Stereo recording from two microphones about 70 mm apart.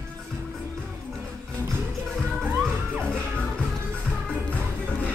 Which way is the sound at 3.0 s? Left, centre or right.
Centre.